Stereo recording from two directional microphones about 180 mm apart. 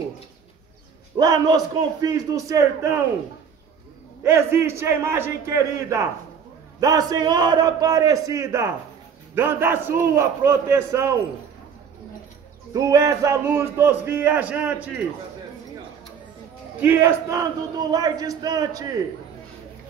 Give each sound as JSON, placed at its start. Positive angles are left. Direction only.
{"t": 1.1, "sound": "speech", "side_deg": -20}
{"t": 4.2, "sound": "a man's voice", "side_deg": -15}
{"t": 12.7, "sound": "a man's voice", "side_deg": -20}
{"t": 16.8, "sound": "speech", "side_deg": -15}